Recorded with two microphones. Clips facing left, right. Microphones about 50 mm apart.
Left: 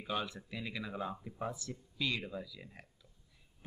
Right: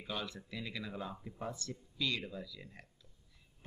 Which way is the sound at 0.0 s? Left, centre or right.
Centre.